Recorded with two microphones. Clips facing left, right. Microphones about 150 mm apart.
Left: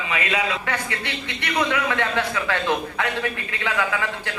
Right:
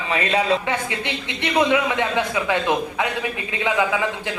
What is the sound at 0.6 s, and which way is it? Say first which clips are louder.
A man's voice: right 3 dB; 20° right (ahead or behind).